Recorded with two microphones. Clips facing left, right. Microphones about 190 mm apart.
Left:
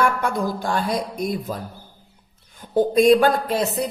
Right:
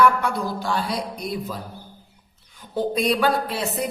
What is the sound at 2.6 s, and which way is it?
Speech, 50° left (ahead or behind).